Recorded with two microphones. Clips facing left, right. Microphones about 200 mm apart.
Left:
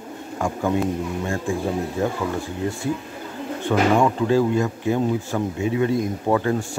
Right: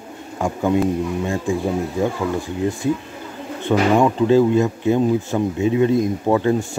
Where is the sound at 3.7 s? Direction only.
20° right (ahead or behind).